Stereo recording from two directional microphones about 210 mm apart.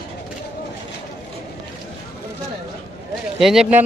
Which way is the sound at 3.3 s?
Centre (ahead or behind).